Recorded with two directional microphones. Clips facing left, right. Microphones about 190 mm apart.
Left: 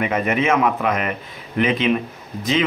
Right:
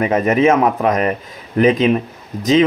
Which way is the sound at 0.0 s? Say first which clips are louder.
Right 6 dB; 40° right (ahead or behind).